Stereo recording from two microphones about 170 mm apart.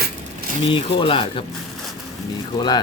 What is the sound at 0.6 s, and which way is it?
Speech, 30° left (ahead or behind).